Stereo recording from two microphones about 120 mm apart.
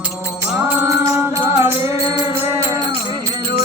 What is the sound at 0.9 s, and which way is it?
Music, 25° right (ahead or behind).